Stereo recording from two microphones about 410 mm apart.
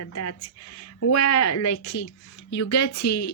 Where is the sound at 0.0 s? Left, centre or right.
Left.